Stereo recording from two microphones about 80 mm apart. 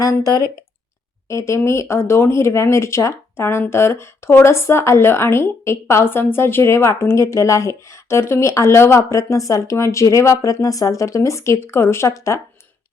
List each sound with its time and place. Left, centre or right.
0.0 s speech: left
1.3 s speech: left